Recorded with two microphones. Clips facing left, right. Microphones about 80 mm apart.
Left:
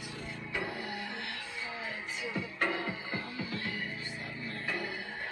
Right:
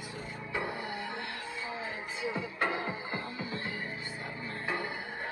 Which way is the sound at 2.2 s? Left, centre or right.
Right.